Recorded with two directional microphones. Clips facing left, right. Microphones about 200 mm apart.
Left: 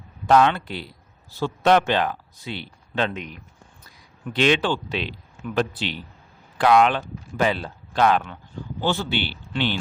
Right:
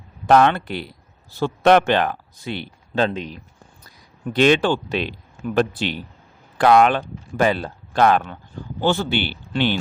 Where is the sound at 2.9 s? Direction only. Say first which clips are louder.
Right 4 dB; 35° right (ahead or behind).